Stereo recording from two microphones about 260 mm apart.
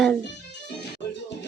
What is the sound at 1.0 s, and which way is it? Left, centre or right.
Music, left.